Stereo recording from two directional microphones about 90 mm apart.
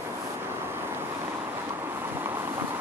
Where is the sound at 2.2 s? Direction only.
30° right (ahead or behind).